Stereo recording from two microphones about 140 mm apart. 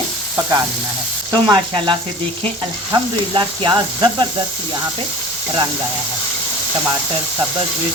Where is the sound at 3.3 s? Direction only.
35° right (ahead or behind).